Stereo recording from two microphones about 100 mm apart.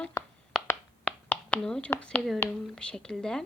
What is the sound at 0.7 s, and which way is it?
Finger snapping, 15° left (ahead or behind).